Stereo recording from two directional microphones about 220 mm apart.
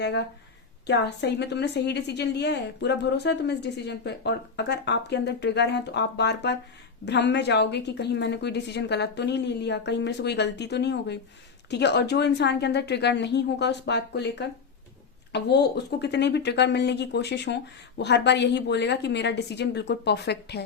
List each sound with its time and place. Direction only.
0.0 s a woman's voice: 50° left (ahead or behind)